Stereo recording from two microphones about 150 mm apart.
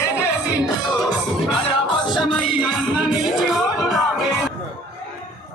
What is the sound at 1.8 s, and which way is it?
Music, 30° left (ahead or behind).